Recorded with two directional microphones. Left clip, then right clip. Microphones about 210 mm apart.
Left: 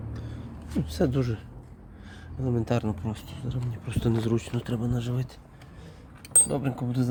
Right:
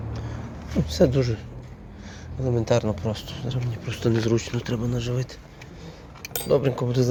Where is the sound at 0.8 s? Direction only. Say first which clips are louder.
Right 7 dB; 20° left (ahead or behind).